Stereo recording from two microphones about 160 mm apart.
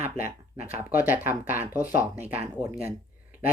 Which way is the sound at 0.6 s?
10° right (ahead or behind).